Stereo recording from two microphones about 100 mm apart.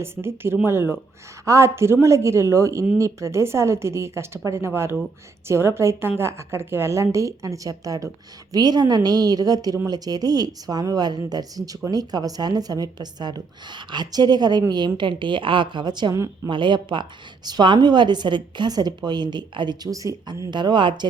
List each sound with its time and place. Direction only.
0.0 s a woman's voice: 25° right (ahead or behind); by 19.9 s 50° right (ahead or behind)
19.9 s a woman's voice: 35° right (ahead or behind)
20.5 s a woman's voice: 50° right (ahead or behind)